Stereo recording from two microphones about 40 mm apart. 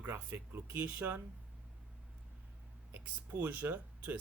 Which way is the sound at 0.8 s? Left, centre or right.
Right.